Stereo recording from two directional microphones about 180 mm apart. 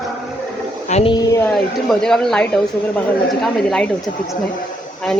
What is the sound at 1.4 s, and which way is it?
Speech, 5° left (ahead or behind).